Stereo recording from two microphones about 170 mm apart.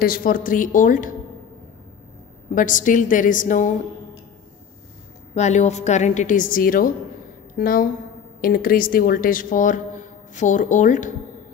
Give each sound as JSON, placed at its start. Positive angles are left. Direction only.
{"t": 0.0, "sound": "a woman's voice", "side_deg": 60}
{"t": 2.5, "sound": "a woman's voice", "side_deg": 50}
{"t": 5.3, "sound": "a woman's voice", "side_deg": 40}